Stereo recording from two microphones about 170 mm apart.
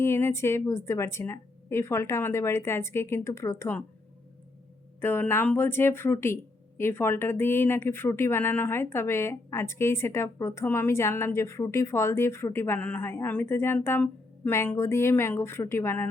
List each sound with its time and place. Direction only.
0.0 s speech: 15° left (ahead or behind)
4.9 s speech: 10° left (ahead or behind)